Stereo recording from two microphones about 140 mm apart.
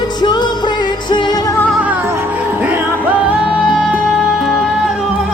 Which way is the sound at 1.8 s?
15° right (ahead or behind).